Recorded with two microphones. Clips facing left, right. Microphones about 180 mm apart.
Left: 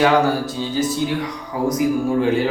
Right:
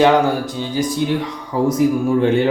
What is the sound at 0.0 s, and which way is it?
Speech, 15° right (ahead or behind).